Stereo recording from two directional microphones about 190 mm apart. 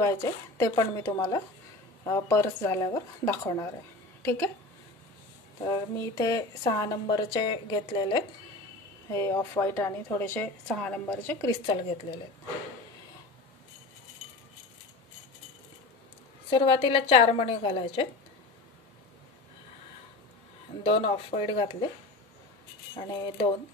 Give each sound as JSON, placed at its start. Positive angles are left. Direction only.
{"t": 0.0, "sound": "a woman's voice", "side_deg": 15}
{"t": 5.7, "sound": "speech", "side_deg": 20}
{"t": 9.1, "sound": "a woman's voice", "side_deg": 15}
{"t": 11.6, "sound": "speech", "side_deg": 25}
{"t": 16.4, "sound": "speech", "side_deg": 25}
{"t": 20.8, "sound": "speech", "side_deg": 30}
{"t": 22.9, "sound": "speech", "side_deg": 25}